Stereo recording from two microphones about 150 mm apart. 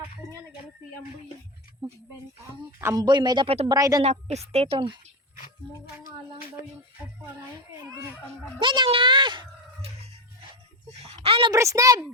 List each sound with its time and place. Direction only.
1.8 s a child's voice: 30° right (ahead or behind)
4.0 s a woman's voice: 45° right (ahead or behind)
6.1 s speech: 25° right (ahead or behind)
8.5 s a child's voice: 30° right (ahead or behind)
11.0 s a child's voice: 40° right (ahead or behind)
11.5 s speech: 20° right (ahead or behind)